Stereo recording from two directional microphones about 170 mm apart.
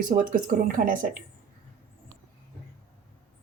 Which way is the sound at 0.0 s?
55° right (ahead or behind).